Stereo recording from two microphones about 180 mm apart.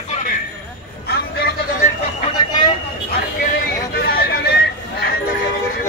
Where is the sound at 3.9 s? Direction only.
60° left (ahead or behind).